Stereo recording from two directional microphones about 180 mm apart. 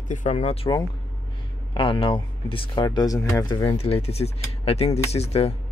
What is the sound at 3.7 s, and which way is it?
Speech, 35° left (ahead or behind).